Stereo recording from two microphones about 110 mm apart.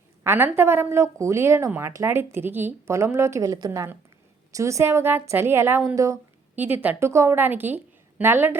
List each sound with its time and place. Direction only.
0.3 s a woman's voice: 20° right (ahead or behind)
3.7 s a woman's voice: 20° right (ahead or behind)
6.6 s a woman's voice: 15° right (ahead or behind)